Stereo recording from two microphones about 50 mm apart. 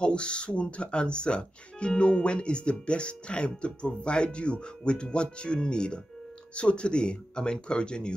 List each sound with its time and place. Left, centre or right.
0.0 s speech: centre